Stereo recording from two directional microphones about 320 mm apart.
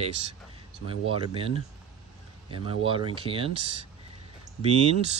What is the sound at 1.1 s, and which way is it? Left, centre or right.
Speech, centre.